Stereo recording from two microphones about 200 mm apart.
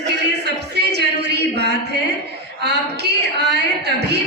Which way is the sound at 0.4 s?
55° right (ahead or behind).